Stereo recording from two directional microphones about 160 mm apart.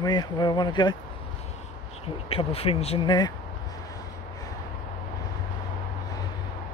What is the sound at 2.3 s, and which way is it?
Speech, 35° left (ahead or behind).